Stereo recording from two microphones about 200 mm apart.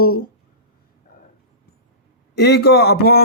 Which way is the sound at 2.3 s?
55° left (ahead or behind).